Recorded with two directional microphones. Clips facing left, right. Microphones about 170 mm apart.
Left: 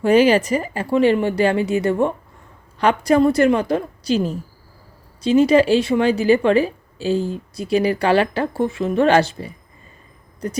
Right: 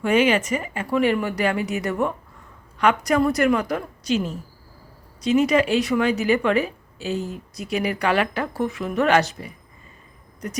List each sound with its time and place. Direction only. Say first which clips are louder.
0.0 s a woman's voice: left 5 dB; 35° left (ahead or behind)